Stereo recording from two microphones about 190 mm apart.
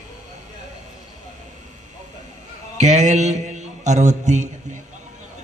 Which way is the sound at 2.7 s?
40° right (ahead or behind).